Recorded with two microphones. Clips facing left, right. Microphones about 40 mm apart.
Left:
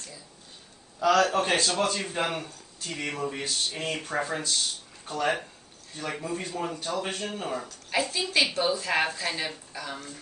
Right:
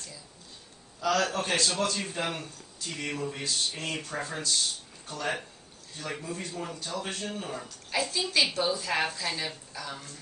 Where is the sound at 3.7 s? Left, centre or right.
Centre.